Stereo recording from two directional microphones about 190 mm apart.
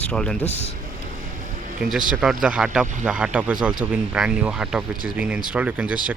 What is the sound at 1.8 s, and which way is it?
Speech, 5° right (ahead or behind).